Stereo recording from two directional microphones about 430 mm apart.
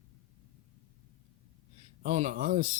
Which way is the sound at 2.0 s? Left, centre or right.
Centre.